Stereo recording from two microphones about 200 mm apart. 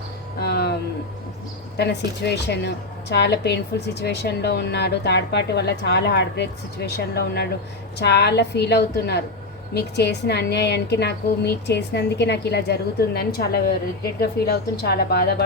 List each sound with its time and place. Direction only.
0.3 s music: 50° left (ahead or behind)
1.7 s a woman's voice: 55° left (ahead or behind)